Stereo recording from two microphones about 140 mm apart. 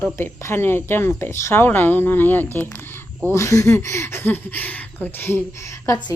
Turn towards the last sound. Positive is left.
turn(degrees=20)  # may be behind; listen again after turning